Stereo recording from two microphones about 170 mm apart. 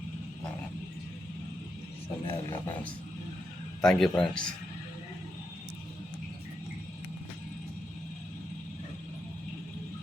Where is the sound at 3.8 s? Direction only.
5° left (ahead or behind).